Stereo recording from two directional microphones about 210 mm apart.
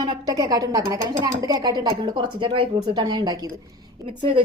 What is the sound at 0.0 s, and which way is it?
A woman's voice, 20° right (ahead or behind).